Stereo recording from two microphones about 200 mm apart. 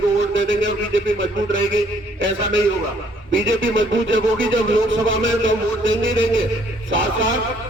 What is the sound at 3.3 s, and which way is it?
A man's voice, 70° right (ahead or behind).